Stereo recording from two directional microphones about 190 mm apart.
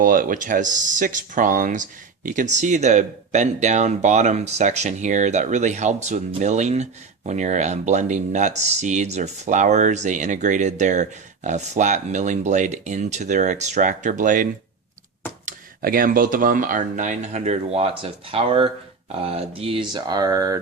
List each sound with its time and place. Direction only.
0.0 s speech: 45° right (ahead or behind)
15.4 s speech: 50° right (ahead or behind); by 20.6 s 20° right (ahead or behind)